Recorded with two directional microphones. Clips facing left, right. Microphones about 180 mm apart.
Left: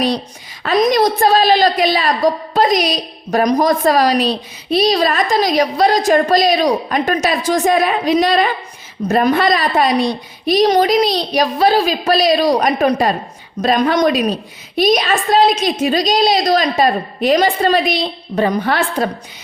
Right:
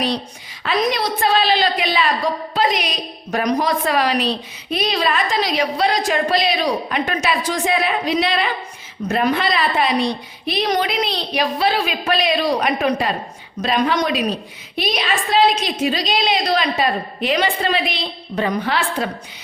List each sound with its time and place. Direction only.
0.6 s a woman's voice: 45° left (ahead or behind)